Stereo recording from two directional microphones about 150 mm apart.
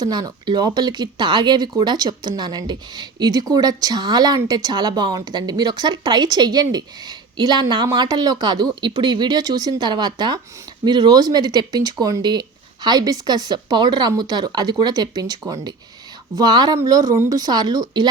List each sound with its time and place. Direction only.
0.0 s speech: 30° right (ahead or behind)